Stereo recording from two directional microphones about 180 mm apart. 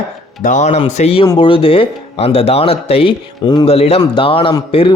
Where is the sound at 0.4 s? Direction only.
40° left (ahead or behind).